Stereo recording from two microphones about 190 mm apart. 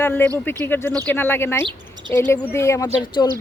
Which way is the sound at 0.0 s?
10° left (ahead or behind).